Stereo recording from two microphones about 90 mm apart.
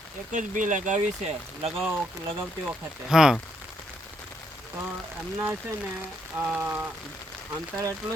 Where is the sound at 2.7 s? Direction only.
5° right (ahead or behind).